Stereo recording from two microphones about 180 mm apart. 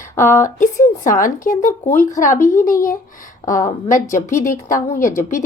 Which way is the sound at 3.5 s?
45° left (ahead or behind).